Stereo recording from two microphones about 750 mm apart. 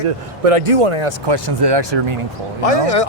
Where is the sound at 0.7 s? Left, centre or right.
Right.